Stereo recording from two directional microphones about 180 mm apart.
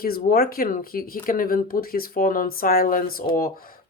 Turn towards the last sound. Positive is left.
turn(degrees=50)  # may be behind; listen again after turning